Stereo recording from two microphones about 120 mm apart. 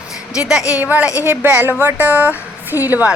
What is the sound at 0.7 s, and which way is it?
Speech, 10° right (ahead or behind).